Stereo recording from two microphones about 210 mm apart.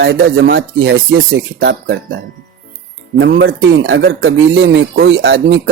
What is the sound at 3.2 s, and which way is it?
Speech, 60° right (ahead or behind).